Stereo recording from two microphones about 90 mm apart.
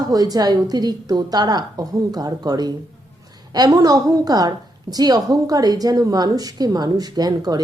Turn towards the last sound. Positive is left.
turn(degrees=-45)  # may be behind; listen again after turning